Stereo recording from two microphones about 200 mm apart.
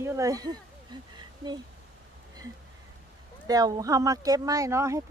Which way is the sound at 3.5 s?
20° right (ahead or behind).